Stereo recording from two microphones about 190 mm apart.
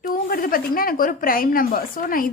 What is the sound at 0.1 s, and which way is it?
A woman's voice, 45° left (ahead or behind).